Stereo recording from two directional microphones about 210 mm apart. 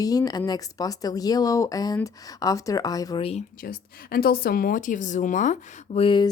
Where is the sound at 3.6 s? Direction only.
45° left (ahead or behind).